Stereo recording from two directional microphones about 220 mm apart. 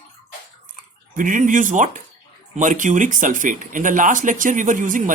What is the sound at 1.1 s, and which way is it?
Speech, 35° right (ahead or behind).